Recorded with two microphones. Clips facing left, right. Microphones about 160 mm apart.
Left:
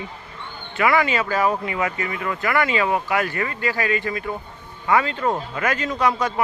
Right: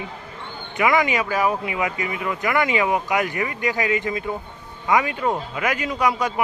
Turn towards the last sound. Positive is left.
turn(degrees=-10)  # may be behind; listen again after turning